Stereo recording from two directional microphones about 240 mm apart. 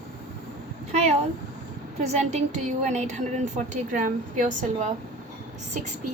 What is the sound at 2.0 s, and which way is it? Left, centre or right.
A woman's voice, right.